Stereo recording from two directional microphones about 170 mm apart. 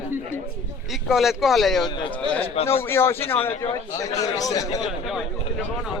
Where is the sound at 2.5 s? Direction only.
35° left (ahead or behind).